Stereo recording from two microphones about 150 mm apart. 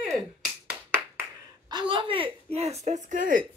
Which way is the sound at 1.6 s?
30° right (ahead or behind).